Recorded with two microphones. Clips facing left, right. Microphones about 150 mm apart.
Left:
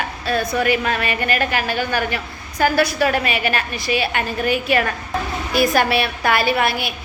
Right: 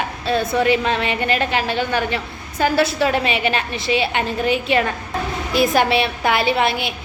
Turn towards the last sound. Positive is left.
turn(degrees=-20)  # may be behind; listen again after turning